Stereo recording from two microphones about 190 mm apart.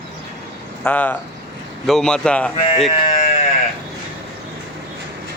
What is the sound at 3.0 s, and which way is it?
Sheep, 35° left (ahead or behind).